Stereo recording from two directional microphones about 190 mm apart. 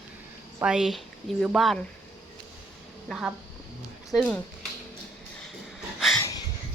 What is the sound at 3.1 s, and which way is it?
Speech, 5° right (ahead or behind).